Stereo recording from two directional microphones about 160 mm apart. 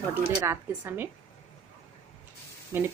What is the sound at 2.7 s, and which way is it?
Speech, 15° right (ahead or behind).